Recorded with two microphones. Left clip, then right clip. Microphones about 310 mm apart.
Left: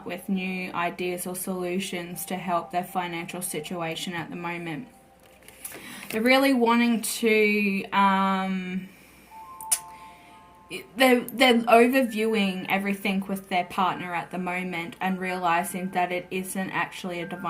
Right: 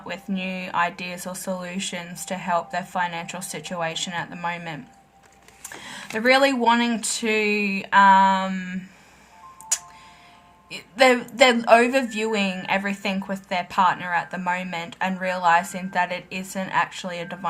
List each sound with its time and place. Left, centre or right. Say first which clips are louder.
0.1 s speech: right 2 dB; right
5.8 s speech: right 4 dB; right
10.7 s speech: right 3 dB; right